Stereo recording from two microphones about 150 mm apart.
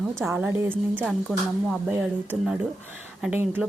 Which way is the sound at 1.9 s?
10° right (ahead or behind).